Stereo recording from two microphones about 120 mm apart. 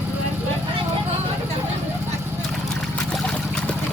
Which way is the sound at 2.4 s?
5° left (ahead or behind).